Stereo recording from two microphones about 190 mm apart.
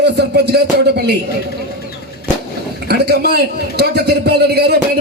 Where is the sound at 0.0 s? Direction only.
60° right (ahead or behind).